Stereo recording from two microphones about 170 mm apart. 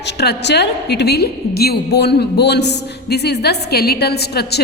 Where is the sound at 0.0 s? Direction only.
75° left (ahead or behind).